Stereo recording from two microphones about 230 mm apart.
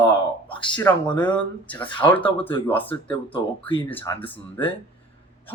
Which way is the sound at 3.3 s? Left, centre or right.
Left.